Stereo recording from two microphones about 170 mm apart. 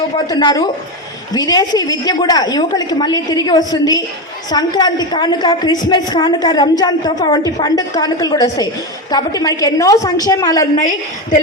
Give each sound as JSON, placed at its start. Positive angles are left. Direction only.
{"t": 0.3, "sound": "a woman's voice", "side_deg": 25}